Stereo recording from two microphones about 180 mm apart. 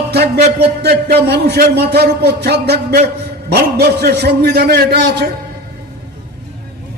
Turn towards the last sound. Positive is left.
turn(degrees=-70)  # may be behind; listen again after turning